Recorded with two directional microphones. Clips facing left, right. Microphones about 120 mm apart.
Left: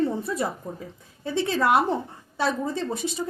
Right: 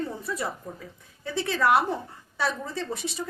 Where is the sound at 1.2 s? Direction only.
25° left (ahead or behind).